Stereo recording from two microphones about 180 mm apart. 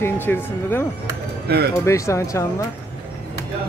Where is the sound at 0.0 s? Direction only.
10° left (ahead or behind).